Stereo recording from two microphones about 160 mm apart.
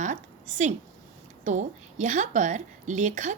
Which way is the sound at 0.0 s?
50° right (ahead or behind).